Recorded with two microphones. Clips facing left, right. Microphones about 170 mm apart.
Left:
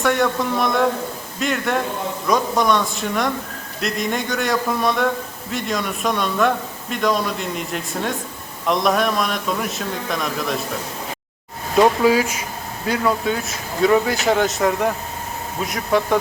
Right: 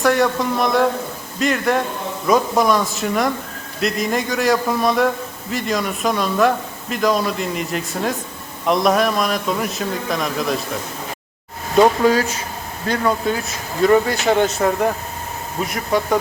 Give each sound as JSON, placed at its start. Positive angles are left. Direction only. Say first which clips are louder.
{"t": 0.0, "sound": "speech", "louder": "right 2 dB", "side_deg": 0}
{"t": 11.8, "sound": "speech", "louder": "right 1 dB", "side_deg": 10}